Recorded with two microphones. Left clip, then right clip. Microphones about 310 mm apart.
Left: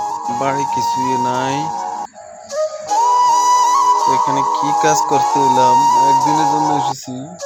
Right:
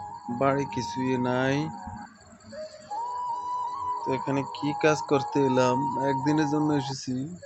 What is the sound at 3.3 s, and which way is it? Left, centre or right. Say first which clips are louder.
Music: left 19 dB; left.